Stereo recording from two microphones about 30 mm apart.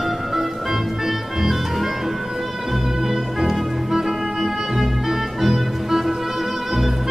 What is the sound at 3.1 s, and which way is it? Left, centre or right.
Music, centre.